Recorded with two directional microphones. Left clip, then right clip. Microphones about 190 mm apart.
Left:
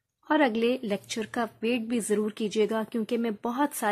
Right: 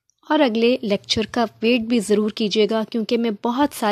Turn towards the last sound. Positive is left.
turn(degrees=-35)  # may be behind; listen again after turning